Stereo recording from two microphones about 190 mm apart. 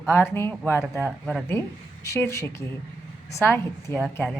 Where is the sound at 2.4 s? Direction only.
15° left (ahead or behind).